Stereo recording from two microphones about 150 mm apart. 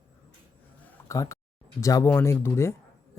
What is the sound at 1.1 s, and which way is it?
Speech, 20° left (ahead or behind).